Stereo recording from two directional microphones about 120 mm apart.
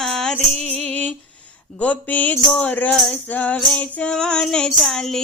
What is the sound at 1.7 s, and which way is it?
Singing, 10° left (ahead or behind).